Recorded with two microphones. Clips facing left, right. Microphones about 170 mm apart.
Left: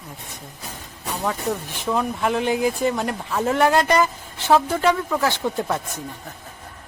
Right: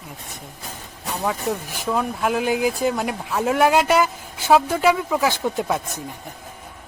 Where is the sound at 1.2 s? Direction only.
Centre (ahead or behind).